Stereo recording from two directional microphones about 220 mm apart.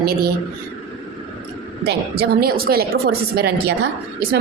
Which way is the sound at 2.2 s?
45° right (ahead or behind).